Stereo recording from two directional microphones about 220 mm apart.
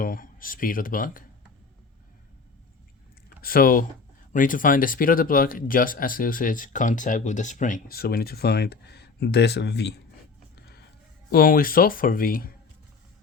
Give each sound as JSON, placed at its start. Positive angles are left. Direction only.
{"t": 0.0, "sound": "speech", "side_deg": 40}
{"t": 3.4, "sound": "speech", "side_deg": 40}
{"t": 11.3, "sound": "speech", "side_deg": 40}